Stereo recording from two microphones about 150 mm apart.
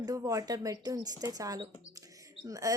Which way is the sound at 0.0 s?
25° right (ahead or behind).